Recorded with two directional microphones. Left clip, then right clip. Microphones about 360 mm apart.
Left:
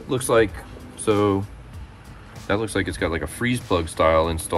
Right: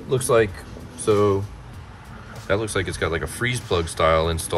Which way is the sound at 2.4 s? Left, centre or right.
Left.